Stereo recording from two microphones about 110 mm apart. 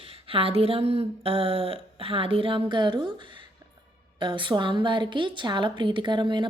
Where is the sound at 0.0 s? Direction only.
55° right (ahead or behind).